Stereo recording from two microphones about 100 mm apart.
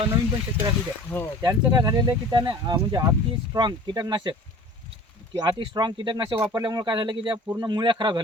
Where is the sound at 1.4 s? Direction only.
40° right (ahead or behind); by 6.3 s 55° right (ahead or behind).